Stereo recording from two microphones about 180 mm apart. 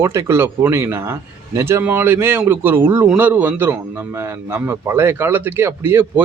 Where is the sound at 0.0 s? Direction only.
15° right (ahead or behind).